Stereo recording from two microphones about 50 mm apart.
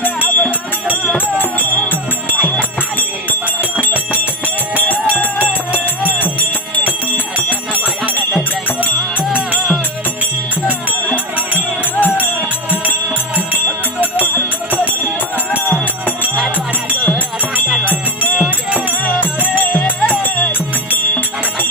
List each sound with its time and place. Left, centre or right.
0.0 s music: left
2.3 s music: centre
5.7 s music: left
11.1 s music: left
14.2 s music: left